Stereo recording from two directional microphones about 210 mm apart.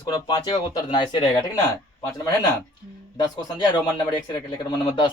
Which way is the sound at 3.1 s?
20° left (ahead or behind).